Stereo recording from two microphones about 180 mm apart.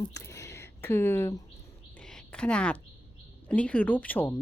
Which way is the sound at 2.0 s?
5° left (ahead or behind).